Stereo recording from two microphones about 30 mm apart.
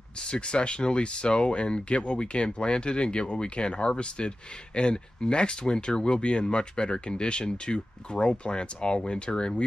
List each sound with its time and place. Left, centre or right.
0.2 s speech: left